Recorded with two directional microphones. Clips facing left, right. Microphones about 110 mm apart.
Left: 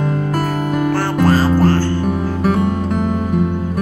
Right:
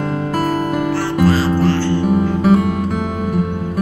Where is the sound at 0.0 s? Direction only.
Centre (ahead or behind).